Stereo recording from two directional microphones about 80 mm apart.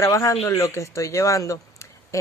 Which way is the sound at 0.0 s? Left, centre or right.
Left.